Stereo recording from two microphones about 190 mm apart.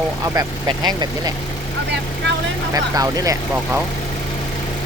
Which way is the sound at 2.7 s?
20° right (ahead or behind).